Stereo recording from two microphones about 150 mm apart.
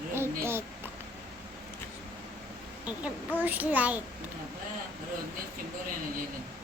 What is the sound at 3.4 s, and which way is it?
Speech, 10° right (ahead or behind).